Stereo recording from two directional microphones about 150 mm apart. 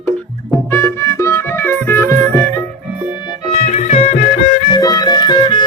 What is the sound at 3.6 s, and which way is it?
Music, 45° left (ahead or behind).